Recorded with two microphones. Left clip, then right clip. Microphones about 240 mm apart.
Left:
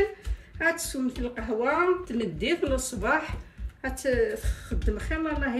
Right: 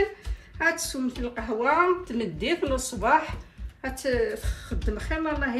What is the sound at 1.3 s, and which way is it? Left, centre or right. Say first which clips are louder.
A woman's voice: right 3 dB; centre.